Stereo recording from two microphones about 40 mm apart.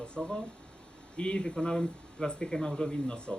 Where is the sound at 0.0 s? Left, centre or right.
Left.